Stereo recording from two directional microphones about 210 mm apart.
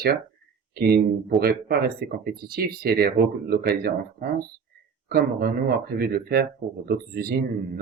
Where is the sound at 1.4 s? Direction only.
45° right (ahead or behind).